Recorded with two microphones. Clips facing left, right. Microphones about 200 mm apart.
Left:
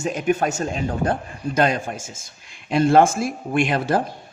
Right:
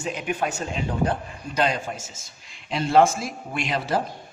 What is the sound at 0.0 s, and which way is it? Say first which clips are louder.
A man's voice: left 6 dB; 45° left (ahead or behind).